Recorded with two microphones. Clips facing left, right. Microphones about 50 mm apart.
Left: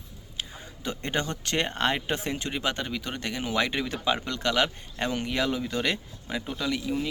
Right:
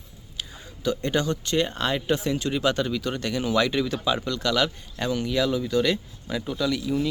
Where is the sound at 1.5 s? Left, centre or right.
Left.